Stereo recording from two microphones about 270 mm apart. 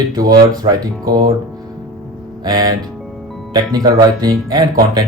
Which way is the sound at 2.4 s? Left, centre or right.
Centre.